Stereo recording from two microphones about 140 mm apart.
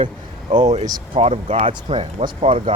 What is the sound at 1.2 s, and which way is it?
Speech, 45° right (ahead or behind).